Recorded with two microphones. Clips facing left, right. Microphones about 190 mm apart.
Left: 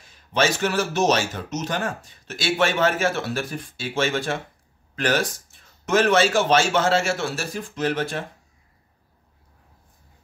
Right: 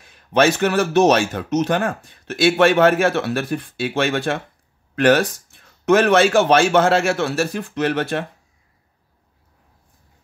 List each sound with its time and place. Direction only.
0.0 s a man's voice: 60° right (ahead or behind)